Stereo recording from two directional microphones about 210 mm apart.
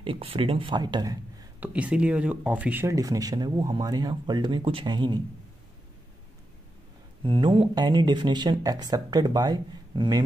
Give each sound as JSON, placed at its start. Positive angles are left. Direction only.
{"t": 0.0, "sound": "speech", "side_deg": -25}
{"t": 1.7, "sound": "speech", "side_deg": -5}
{"t": 7.2, "sound": "speech", "side_deg": -25}